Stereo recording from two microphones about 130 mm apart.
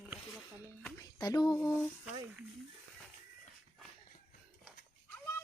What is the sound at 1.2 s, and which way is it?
Speech, 25° left (ahead or behind).